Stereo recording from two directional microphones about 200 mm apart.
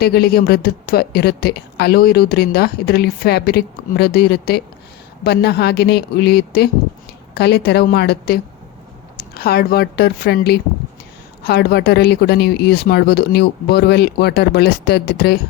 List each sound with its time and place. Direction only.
0.0 s a woman's voice: 50° left (ahead or behind)